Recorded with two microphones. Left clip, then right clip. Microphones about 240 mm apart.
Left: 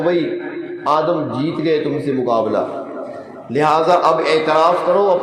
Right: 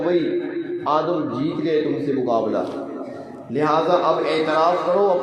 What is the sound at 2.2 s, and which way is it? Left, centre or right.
A man's voice, left.